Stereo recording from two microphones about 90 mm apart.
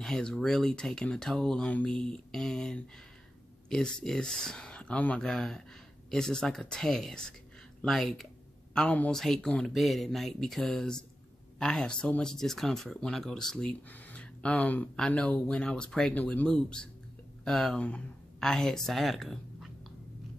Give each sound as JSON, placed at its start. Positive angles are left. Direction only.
{"t": 0.0, "sound": "speech", "side_deg": 10}
{"t": 8.7, "sound": "speech", "side_deg": 15}
{"t": 13.8, "sound": "a sound", "side_deg": 20}
{"t": 15.0, "sound": "speech", "side_deg": 10}